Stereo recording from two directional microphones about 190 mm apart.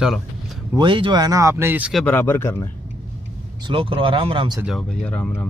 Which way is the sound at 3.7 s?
30° right (ahead or behind).